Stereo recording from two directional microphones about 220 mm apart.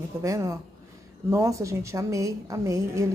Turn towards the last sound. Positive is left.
turn(degrees=-15)  # may be behind; listen again after turning